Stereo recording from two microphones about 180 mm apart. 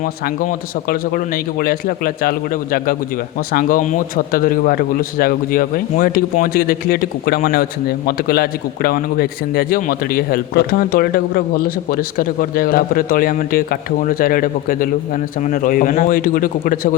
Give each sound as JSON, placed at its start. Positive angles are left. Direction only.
{"t": 0.0, "sound": "a man's voice", "side_deg": 50}